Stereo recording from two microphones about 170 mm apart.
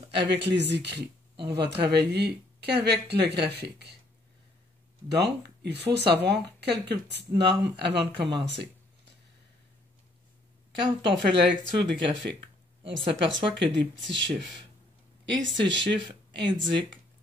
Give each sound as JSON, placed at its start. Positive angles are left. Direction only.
{"t": 0.2, "sound": "speech", "side_deg": -90}
{"t": 1.4, "sound": "speech", "side_deg": -75}
{"t": 5.0, "sound": "speech", "side_deg": -75}
{"t": 11.0, "sound": "speech", "side_deg": -90}
{"t": 11.5, "sound": "speech", "side_deg": 5}
{"t": 12.8, "sound": "speech", "side_deg": -90}